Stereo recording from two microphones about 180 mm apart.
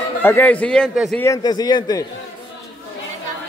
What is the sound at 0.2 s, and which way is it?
Speech, 10° left (ahead or behind).